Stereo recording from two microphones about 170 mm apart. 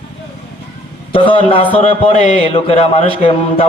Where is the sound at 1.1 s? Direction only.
30° left (ahead or behind).